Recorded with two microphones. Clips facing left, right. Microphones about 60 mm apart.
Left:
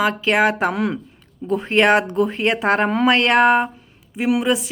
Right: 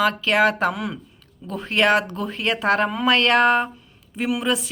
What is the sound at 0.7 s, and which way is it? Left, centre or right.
Speech, left.